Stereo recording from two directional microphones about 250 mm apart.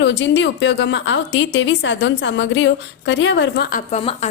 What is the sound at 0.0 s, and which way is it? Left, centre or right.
A woman's voice, left.